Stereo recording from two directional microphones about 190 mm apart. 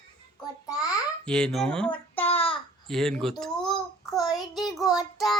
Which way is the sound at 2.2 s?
30° left (ahead or behind).